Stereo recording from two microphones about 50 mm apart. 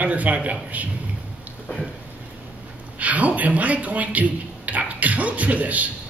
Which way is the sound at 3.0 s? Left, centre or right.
Right.